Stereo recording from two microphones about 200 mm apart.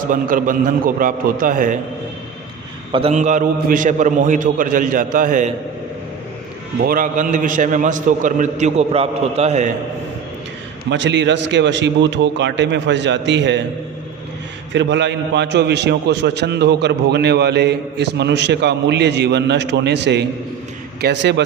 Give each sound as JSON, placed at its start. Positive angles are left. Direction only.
{"t": 0.1, "sound": "a man's voice", "side_deg": -45}
{"t": 2.9, "sound": "a man's voice", "side_deg": -30}
{"t": 6.8, "sound": "a man's voice", "side_deg": -45}
{"t": 10.8, "sound": "a man's voice", "side_deg": -65}
{"t": 14.7, "sound": "a man's voice", "side_deg": -65}